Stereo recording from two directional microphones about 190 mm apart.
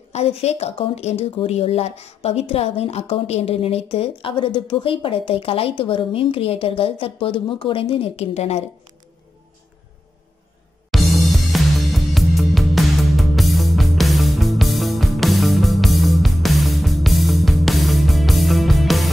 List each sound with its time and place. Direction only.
0.1 s a woman's voice: 35° left (ahead or behind)
10.9 s music: centre (ahead or behind)